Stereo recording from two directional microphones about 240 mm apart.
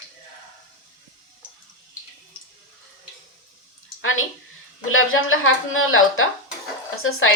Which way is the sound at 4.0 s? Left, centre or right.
Left.